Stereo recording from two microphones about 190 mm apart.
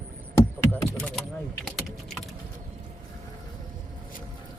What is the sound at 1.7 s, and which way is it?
Speech, centre (ahead or behind).